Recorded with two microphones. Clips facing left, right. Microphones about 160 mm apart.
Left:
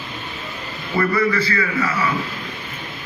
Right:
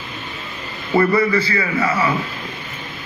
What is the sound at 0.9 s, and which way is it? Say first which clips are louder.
A man's voice: right 3 dB; 30° right (ahead or behind).